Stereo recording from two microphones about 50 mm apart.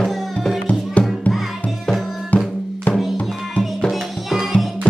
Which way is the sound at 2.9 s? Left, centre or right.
Left.